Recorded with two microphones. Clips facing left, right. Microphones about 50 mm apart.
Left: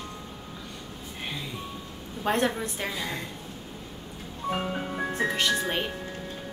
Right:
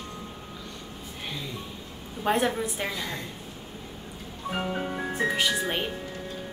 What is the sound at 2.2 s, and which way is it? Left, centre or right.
Speech, centre.